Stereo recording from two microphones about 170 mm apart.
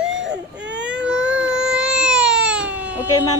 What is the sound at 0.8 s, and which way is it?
Baby cry, 5° right (ahead or behind).